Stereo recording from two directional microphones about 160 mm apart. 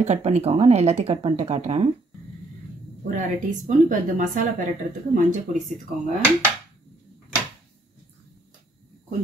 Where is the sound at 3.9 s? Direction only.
55° right (ahead or behind).